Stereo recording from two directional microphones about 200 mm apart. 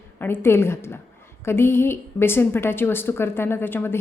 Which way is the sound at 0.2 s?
10° left (ahead or behind).